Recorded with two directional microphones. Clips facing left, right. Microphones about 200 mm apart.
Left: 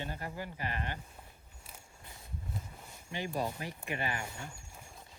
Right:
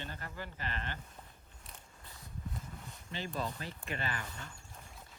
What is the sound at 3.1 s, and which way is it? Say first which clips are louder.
Speech: left 3 dB; 15° left (ahead or behind).